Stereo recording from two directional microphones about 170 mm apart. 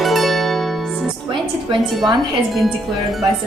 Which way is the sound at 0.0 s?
Centre (ahead or behind).